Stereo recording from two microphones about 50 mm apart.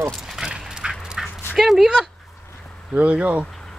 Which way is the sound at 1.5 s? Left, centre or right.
Centre.